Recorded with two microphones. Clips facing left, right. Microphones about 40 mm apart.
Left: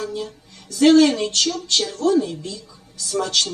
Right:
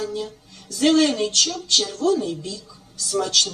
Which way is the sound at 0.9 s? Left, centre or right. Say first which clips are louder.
Left 4 dB; centre.